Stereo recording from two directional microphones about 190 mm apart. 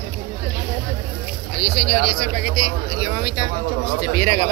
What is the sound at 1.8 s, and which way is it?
A man's voice, 50° left (ahead or behind).